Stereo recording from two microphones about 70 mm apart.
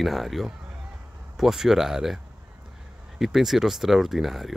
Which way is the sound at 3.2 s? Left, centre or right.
Centre.